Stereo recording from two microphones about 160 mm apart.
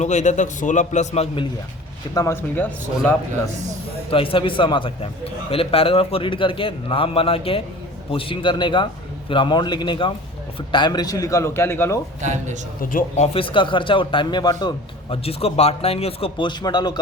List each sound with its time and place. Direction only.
0.0 s a man's voice: 50° left (ahead or behind)
2.1 s a man's voice: 15° left (ahead or behind)
4.1 s a man's voice: 35° left (ahead or behind); by 11.9 s 15° left (ahead or behind)
12.2 s speech: 50° right (ahead or behind)
12.8 s speech: 60° left (ahead or behind)
13.2 s a man's voice: 35° left (ahead or behind)